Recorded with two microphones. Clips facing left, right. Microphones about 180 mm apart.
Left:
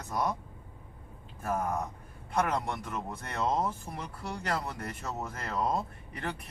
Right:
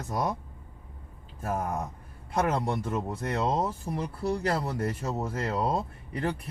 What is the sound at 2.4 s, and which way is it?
Speech, 30° right (ahead or behind).